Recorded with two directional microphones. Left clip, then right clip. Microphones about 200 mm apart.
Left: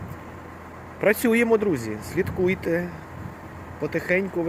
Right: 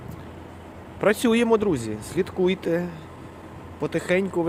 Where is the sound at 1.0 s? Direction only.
10° right (ahead or behind).